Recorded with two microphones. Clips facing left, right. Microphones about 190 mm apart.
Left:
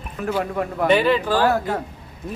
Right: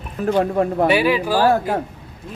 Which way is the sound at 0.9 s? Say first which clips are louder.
Even; 10° right (ahead or behind).